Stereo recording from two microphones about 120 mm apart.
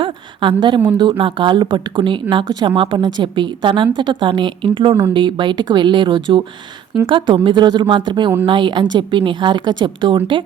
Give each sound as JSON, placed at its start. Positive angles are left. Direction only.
{"t": 0.0, "sound": "a woman's voice", "side_deg": -45}